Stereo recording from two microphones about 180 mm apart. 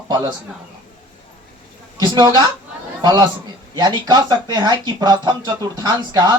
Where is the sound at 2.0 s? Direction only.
25° right (ahead or behind).